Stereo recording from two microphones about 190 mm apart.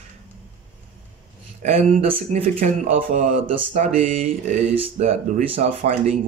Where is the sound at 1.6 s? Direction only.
30° right (ahead or behind).